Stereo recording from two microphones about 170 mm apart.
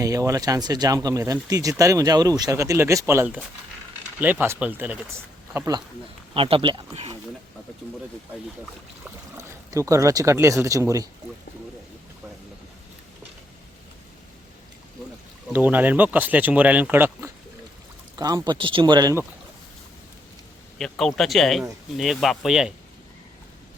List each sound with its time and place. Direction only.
0.0 s speech: 20° right (ahead or behind)
6.3 s speech: 30° right (ahead or behind)
9.0 s speech: 15° right (ahead or behind)
15.5 s speech: 10° right (ahead or behind)
20.7 s speech: centre (ahead or behind)